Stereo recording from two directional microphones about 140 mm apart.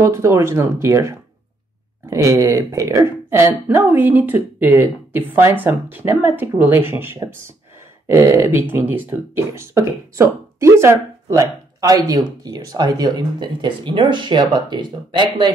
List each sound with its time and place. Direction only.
0.0 s speech: 20° right (ahead or behind); by 15.5 s 35° right (ahead or behind)